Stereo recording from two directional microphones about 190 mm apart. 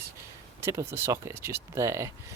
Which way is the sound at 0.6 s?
15° right (ahead or behind).